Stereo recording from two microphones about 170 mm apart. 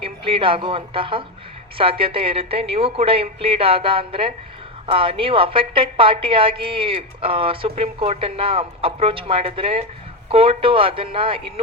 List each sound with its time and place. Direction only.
0.0 s a woman's voice: 30° right (ahead or behind)